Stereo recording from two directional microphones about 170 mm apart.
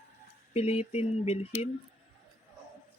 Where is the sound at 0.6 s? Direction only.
35° left (ahead or behind).